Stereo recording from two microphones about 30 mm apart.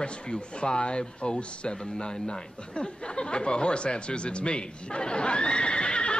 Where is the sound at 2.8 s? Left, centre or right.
Left.